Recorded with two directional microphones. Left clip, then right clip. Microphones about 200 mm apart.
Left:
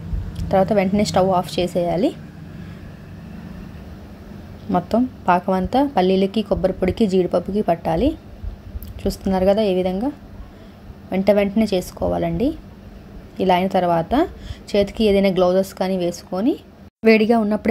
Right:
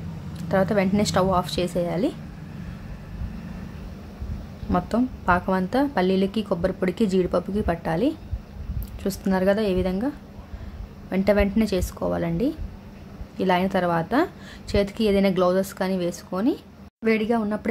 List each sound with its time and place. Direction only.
0.5 s a woman's voice: 5° left (ahead or behind)
4.6 s a woman's voice: 5° left (ahead or behind)
17.0 s a woman's voice: 20° left (ahead or behind)